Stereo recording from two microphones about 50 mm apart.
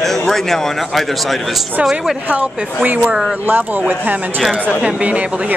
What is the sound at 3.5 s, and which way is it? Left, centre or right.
Speech, right.